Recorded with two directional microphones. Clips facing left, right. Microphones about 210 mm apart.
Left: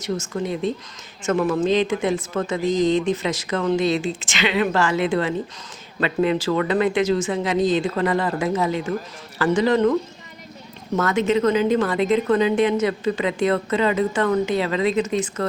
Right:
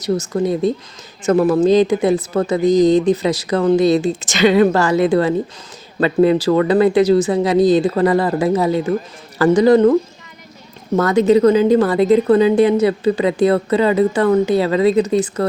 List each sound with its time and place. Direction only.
0.0 s a woman's voice: 35° right (ahead or behind)